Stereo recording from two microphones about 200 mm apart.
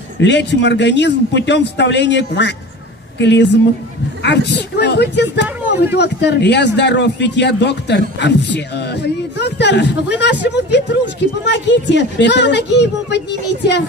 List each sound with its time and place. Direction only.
0.2 s speech: 60° left (ahead or behind)